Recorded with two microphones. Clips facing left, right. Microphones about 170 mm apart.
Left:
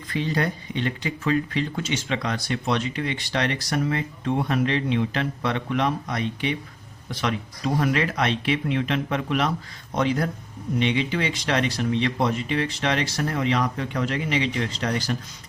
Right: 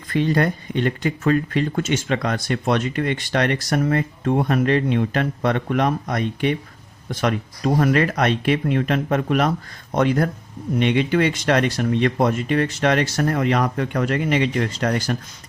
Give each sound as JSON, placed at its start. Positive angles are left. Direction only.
{"t": 0.1, "sound": "speech", "side_deg": -55}